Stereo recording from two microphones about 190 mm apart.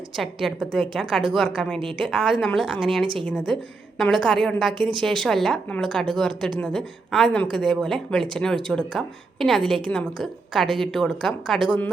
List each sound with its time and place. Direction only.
0.2 s speech: centre (ahead or behind)